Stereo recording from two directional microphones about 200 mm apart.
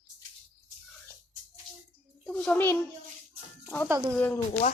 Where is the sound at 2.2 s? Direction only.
5° left (ahead or behind).